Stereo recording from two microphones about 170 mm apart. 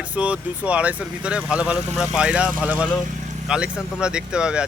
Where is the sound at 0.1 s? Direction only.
5° right (ahead or behind).